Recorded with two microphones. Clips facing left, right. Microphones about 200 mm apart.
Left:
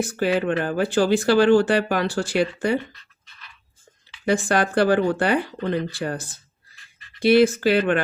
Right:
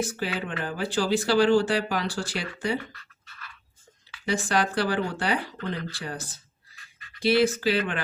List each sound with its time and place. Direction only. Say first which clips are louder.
0.0 s speech: left 8 dB; 55° left (ahead or behind)
2.7 s scratch: left 7 dB; 20° left (ahead or behind)
4.3 s speech: left 5 dB; 55° left (ahead or behind)